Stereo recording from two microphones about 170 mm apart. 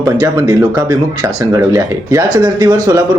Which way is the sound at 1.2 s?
20° right (ahead or behind).